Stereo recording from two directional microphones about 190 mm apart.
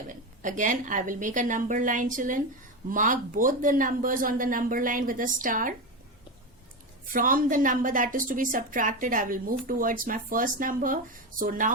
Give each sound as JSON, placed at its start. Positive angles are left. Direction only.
{"t": 0.1, "sound": "a woman's voice", "side_deg": -45}
{"t": 7.1, "sound": "a woman's voice", "side_deg": -45}